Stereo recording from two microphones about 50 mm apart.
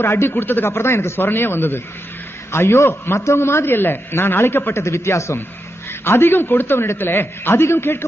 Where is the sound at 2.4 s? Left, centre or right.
Left.